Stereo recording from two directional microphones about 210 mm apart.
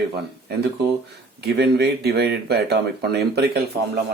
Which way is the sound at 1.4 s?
50° right (ahead or behind).